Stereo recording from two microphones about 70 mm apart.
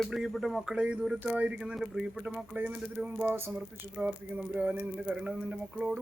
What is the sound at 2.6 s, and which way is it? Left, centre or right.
Speech, right.